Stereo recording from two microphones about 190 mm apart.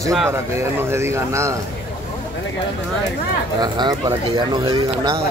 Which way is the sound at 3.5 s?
20° right (ahead or behind).